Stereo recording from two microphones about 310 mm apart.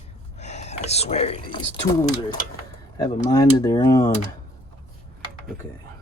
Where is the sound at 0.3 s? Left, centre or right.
Left.